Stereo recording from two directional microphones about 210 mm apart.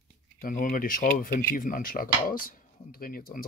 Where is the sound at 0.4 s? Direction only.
40° left (ahead or behind).